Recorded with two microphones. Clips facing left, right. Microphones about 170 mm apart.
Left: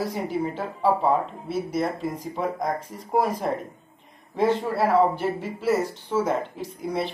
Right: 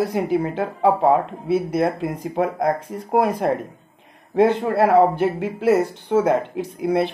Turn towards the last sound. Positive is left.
turn(degrees=-60)  # may be behind; listen again after turning